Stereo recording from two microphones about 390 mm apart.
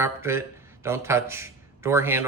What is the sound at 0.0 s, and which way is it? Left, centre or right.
Speech, centre.